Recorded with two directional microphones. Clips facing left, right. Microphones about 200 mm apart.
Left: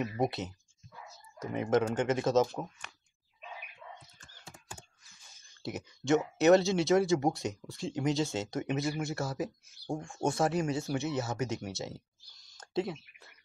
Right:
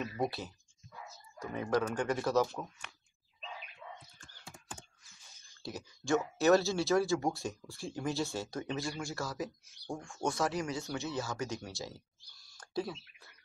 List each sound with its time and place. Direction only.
0.0 s speech: 20° left (ahead or behind)
5.6 s speech: 20° left (ahead or behind)
10.9 s speech: 20° left (ahead or behind)